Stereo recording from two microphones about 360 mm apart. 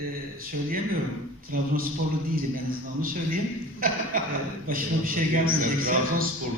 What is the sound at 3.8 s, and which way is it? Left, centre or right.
A man's voice, right.